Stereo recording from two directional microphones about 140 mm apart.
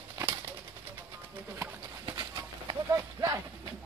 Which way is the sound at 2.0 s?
25° right (ahead or behind).